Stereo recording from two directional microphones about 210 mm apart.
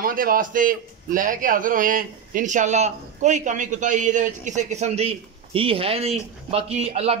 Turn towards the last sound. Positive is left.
turn(degrees=-30)  # may be behind; listen again after turning